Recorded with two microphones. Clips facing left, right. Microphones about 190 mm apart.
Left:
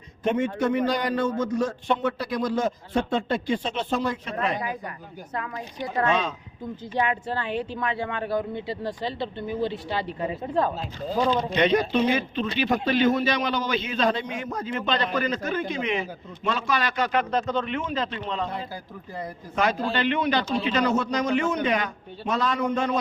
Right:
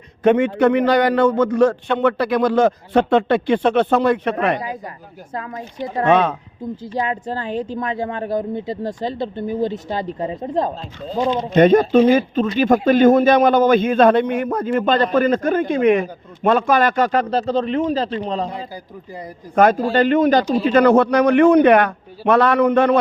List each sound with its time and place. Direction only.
0.2 s a man's voice: 65° right (ahead or behind)
5.3 s speech: 30° right (ahead or behind)
6.1 s a man's voice: 60° right (ahead or behind)
6.9 s a man's voice: 35° right (ahead or behind)
10.2 s speech: 30° right (ahead or behind)
11.5 s a man's voice: 50° right (ahead or behind)
19.5 s a man's voice: 50° right (ahead or behind)
20.7 s a man's voice: 55° right (ahead or behind)